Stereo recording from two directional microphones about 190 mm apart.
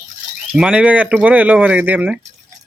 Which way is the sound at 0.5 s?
5° right (ahead or behind).